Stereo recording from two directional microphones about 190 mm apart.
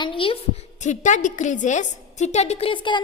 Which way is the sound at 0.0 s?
25° left (ahead or behind).